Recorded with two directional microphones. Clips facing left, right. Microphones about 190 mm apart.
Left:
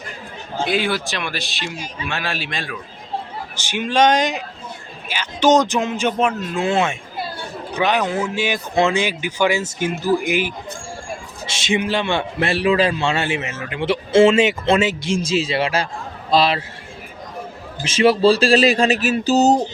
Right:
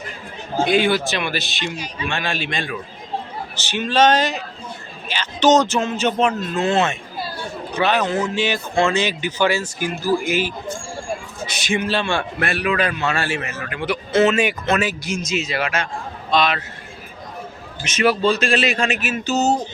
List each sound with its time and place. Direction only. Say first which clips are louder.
0.6 s speech: right 4 dB; centre (ahead or behind)
3.5 s a man's voice: even; 10° left (ahead or behind); by 16.6 s 30° left (ahead or behind)
17.8 s speech: left 4 dB; 30° left (ahead or behind)